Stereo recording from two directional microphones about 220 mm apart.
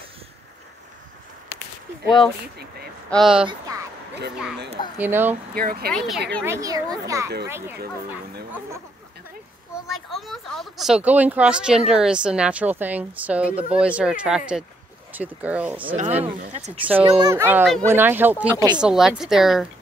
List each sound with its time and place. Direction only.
2.0 s speech: centre (ahead or behind)
3.4 s a sound: 15° right (ahead or behind)
4.9 s a child's voice: 10° right (ahead or behind)
5.5 s speech: 40° right (ahead or behind)
5.9 s speech: centre (ahead or behind)
6.4 s a child's voice: 15° right (ahead or behind)
9.8 s a child's voice: centre (ahead or behind)
16.3 s speech: 25° right (ahead or behind)
17.0 s a child's voice: 15° right (ahead or behind)